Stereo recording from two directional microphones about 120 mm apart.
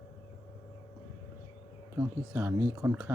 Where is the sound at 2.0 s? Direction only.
20° right (ahead or behind).